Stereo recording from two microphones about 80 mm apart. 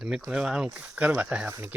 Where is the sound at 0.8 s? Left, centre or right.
Right.